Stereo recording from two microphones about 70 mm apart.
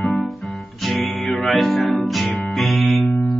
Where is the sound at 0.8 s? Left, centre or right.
Centre.